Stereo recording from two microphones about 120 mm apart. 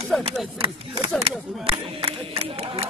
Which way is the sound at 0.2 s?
50° right (ahead or behind).